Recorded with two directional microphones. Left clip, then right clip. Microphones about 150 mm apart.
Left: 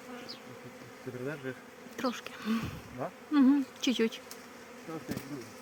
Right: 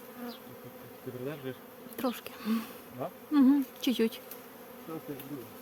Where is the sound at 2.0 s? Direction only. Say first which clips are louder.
Even; 20° right (ahead or behind).